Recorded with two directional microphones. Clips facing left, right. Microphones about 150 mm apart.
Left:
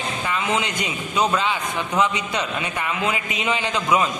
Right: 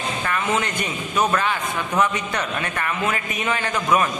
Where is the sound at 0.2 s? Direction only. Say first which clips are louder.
Even; 15° left (ahead or behind).